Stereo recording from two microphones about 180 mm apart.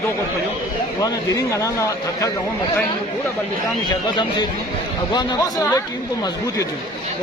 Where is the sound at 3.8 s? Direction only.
25° left (ahead or behind).